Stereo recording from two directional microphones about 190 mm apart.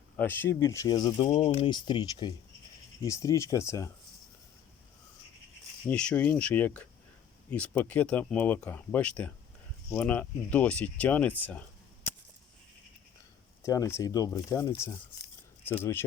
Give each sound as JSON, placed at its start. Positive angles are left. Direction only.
{"t": 0.2, "sound": "speech", "side_deg": 10}
{"t": 5.9, "sound": "speech", "side_deg": 5}
{"t": 13.6, "sound": "speech", "side_deg": 15}